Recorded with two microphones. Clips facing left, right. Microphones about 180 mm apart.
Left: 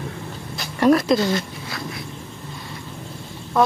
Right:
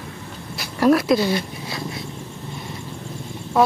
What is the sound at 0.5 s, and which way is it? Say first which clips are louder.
Speech: even; 5° right (ahead or behind).